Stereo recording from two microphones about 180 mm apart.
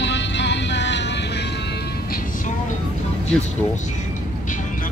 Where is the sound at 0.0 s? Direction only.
75° left (ahead or behind).